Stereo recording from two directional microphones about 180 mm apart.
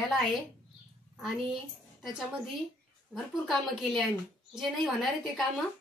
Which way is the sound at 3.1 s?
Centre (ahead or behind).